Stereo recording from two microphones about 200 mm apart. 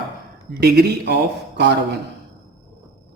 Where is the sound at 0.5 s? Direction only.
55° right (ahead or behind).